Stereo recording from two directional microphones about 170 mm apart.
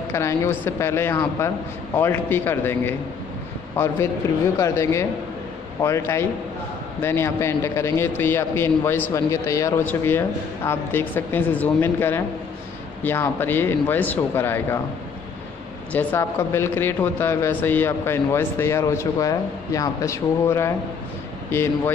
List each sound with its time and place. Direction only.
0.1 s speech: 15° left (ahead or behind)
15.9 s speech: 10° left (ahead or behind)